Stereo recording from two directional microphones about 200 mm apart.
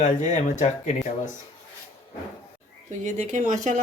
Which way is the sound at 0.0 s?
35° left (ahead or behind).